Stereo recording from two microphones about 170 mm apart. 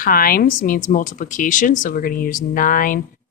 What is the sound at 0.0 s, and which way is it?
A woman's voice, 60° left (ahead or behind).